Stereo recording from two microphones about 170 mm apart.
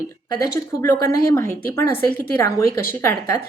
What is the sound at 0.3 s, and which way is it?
Speech, 20° left (ahead or behind).